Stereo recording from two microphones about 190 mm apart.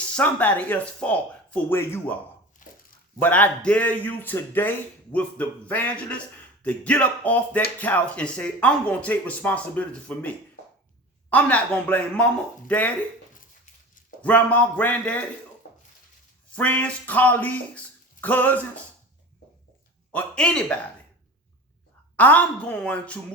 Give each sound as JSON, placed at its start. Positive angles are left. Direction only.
{"t": 0.1, "sound": "speech", "side_deg": 10}
{"t": 2.6, "sound": "a sound", "side_deg": 45}
{"t": 3.2, "sound": "speech", "side_deg": 10}
{"t": 14.2, "sound": "speech", "side_deg": 5}
{"t": 16.5, "sound": "speech", "side_deg": 10}
{"t": 20.1, "sound": "speech", "side_deg": 5}
{"t": 22.1, "sound": "speech", "side_deg": 10}